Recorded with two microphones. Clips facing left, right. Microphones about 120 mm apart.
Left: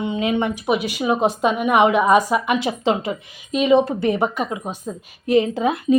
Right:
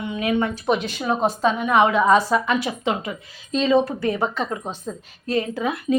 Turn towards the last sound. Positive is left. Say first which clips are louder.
# left 4 dB
turn(degrees=25)  # may be behind; listen again after turning